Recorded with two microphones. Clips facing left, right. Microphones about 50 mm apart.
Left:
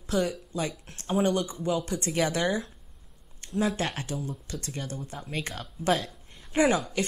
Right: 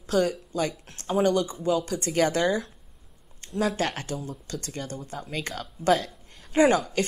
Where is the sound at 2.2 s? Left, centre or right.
Right.